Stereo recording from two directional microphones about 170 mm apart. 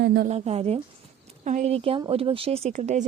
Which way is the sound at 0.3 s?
40° right (ahead or behind).